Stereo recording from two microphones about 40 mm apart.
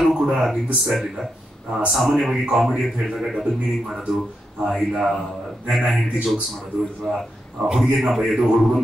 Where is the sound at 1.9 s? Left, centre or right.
Centre.